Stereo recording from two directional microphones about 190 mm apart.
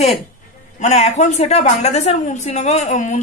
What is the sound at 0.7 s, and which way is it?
A woman's voice, 35° left (ahead or behind).